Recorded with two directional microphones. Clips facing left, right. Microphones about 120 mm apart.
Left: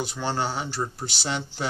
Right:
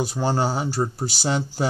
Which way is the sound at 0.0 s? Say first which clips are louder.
Right 5 dB; 40° right (ahead or behind).